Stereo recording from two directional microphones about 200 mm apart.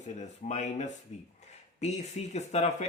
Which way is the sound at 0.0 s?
35° left (ahead or behind).